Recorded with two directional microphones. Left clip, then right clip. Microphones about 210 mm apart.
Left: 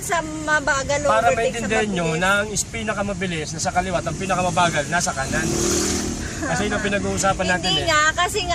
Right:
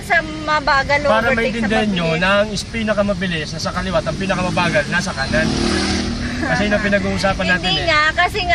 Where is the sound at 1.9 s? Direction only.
45° left (ahead or behind).